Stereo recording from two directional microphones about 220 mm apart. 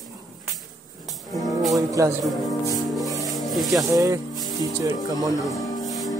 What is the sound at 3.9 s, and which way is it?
Speech, 15° right (ahead or behind).